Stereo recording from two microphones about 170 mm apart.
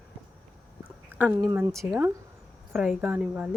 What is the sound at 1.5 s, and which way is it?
Speech, 15° right (ahead or behind).